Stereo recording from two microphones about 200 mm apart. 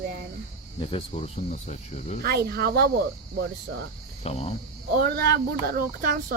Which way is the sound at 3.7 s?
70° right (ahead or behind).